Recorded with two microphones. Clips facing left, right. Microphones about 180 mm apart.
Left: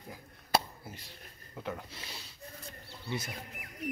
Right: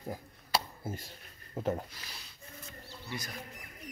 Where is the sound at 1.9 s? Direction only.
25° left (ahead or behind).